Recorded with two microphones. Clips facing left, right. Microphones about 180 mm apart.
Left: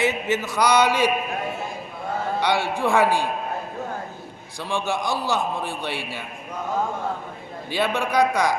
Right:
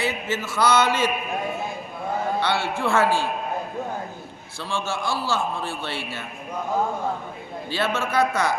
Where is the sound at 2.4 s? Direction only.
15° left (ahead or behind).